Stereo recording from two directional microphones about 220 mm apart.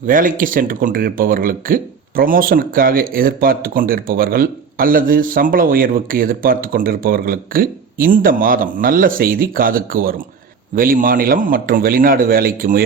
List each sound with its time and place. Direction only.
0.0 s speech: 40° right (ahead or behind)